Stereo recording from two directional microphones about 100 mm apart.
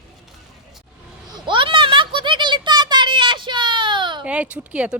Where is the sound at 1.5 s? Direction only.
55° right (ahead or behind).